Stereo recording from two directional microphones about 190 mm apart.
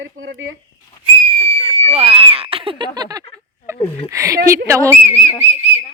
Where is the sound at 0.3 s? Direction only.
75° right (ahead or behind).